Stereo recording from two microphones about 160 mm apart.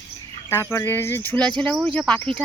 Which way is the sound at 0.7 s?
15° left (ahead or behind).